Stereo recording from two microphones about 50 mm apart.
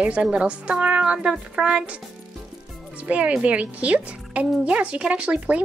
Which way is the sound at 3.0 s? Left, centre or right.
Right.